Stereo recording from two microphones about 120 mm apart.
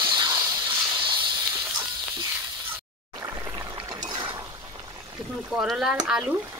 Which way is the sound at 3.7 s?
35° right (ahead or behind).